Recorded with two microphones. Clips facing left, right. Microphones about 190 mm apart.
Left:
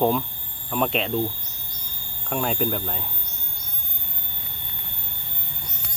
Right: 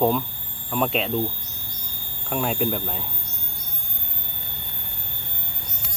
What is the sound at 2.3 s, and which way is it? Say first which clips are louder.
Speech: right 1 dB; centre (ahead or behind).